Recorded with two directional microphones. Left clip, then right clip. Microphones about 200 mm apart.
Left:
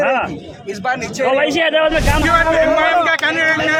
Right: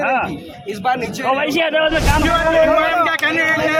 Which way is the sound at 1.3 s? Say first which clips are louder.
Left 3 dB; 30° left (ahead or behind).